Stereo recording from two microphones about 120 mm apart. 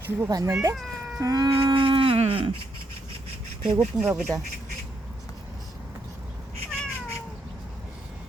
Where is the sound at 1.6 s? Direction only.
45° right (ahead or behind).